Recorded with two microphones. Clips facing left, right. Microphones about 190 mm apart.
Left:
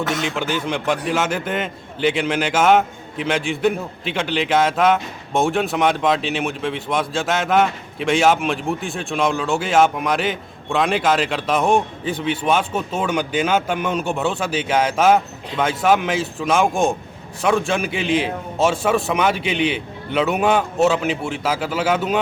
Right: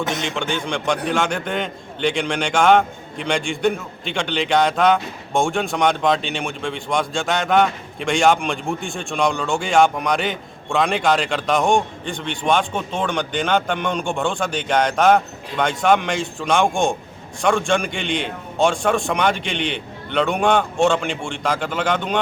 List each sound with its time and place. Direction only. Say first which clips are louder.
0.1 s a man's voice: left 2 dB; centre (ahead or behind)